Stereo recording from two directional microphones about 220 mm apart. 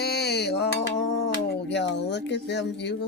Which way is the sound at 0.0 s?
45° left (ahead or behind).